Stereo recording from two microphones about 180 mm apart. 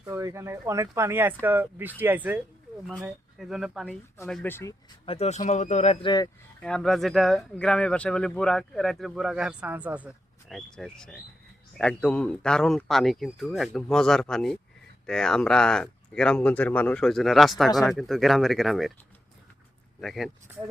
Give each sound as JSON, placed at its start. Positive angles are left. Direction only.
{"t": 0.1, "sound": "speech", "side_deg": -15}
{"t": 5.0, "sound": "speech", "side_deg": 35}
{"t": 6.6, "sound": "speech", "side_deg": 5}
{"t": 20.0, "sound": "speech", "side_deg": 0}